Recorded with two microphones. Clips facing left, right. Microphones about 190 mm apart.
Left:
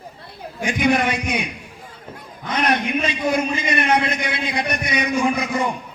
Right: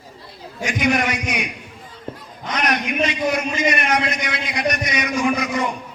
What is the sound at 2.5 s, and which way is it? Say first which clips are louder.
A man's voice: left 1 dB; 30° left (ahead or behind).